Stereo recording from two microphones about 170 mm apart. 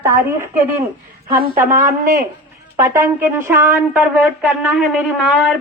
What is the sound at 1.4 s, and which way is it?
Speech, 50° right (ahead or behind).